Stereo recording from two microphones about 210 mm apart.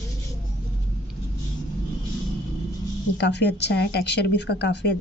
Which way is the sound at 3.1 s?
55° left (ahead or behind).